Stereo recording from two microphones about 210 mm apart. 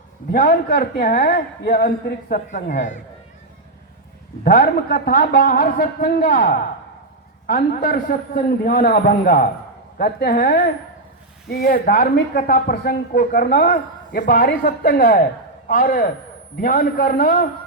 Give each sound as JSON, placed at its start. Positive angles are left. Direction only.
{"t": 0.3, "sound": "a woman's voice", "side_deg": 40}
{"t": 4.4, "sound": "a woman's voice", "side_deg": 40}